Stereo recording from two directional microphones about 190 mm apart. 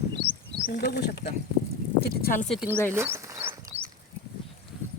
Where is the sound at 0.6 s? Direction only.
55° left (ahead or behind).